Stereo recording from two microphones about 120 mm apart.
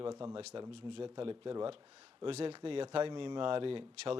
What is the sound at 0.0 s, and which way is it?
Speech, 45° right (ahead or behind).